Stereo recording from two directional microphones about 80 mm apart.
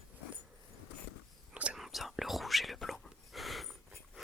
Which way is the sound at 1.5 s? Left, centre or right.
Centre.